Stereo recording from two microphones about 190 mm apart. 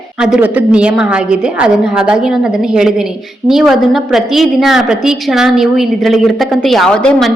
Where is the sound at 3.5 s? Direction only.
Centre (ahead or behind).